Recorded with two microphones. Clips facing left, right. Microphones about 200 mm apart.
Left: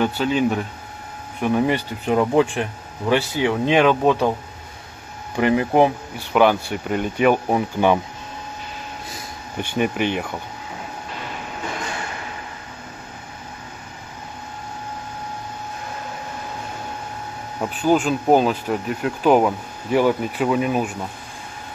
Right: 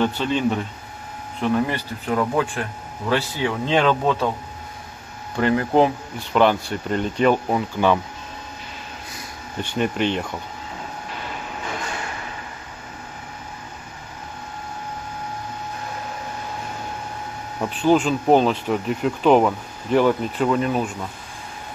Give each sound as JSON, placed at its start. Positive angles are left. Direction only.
{"t": 0.0, "sound": "speech", "side_deg": 10}
{"t": 5.3, "sound": "speech", "side_deg": 15}
{"t": 9.6, "sound": "speech", "side_deg": 10}
{"t": 17.6, "sound": "speech", "side_deg": 5}